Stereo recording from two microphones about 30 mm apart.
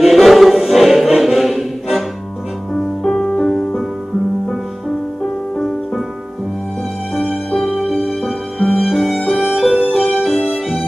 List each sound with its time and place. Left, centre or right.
0.0 s music: centre
7.2 s music: centre
9.4 s music: centre
9.8 s music: centre
10.2 s music: centre